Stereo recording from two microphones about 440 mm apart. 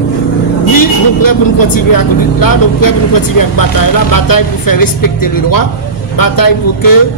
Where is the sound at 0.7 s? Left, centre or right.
Left.